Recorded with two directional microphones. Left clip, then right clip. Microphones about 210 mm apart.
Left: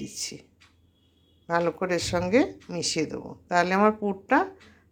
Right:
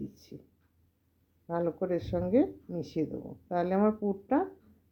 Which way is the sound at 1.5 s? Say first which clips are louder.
Left 6 dB; centre (ahead or behind).